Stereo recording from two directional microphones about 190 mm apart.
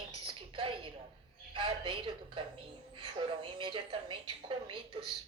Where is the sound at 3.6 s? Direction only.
25° right (ahead or behind).